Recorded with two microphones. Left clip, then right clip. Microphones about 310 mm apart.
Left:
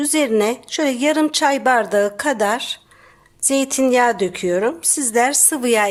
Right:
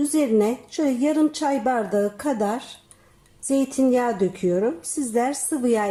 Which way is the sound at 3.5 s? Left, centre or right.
Left.